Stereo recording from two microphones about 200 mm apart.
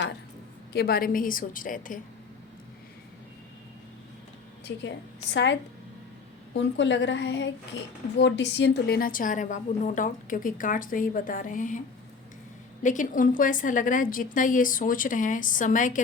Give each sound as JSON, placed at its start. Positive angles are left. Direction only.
{"t": 0.7, "sound": "a woman's voice", "side_deg": 50}
{"t": 5.3, "sound": "a woman's voice", "side_deg": 60}
{"t": 12.8, "sound": "a woman's voice", "side_deg": 40}